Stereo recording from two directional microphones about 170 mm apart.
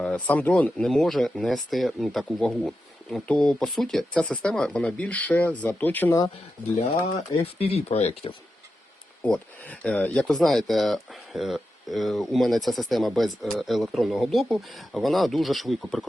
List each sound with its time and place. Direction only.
0.0 s speech: 10° left (ahead or behind)
7.4 s speech: 35° left (ahead or behind)
9.2 s speech: 5° left (ahead or behind)